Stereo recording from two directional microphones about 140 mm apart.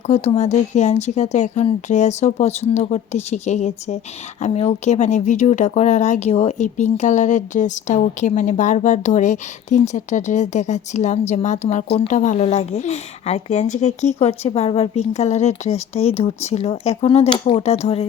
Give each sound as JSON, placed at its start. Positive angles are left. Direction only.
{"t": 0.1, "sound": "speech", "side_deg": 55}